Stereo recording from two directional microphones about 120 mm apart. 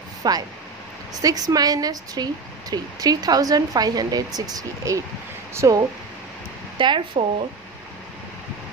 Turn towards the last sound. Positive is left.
turn(degrees=-45)  # may be behind; listen again after turning